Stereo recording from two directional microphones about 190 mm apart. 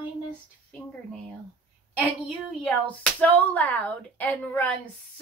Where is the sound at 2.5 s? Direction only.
5° left (ahead or behind).